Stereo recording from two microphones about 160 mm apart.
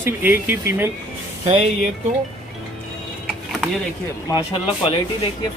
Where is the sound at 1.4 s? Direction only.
40° right (ahead or behind).